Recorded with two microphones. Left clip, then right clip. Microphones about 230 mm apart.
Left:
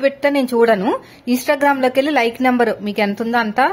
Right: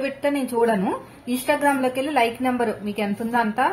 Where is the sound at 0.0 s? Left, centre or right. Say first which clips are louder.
Left 8 dB; left.